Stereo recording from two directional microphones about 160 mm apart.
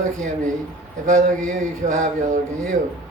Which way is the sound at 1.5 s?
50° right (ahead or behind).